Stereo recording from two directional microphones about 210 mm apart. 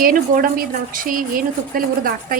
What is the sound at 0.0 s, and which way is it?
Speech, 40° right (ahead or behind).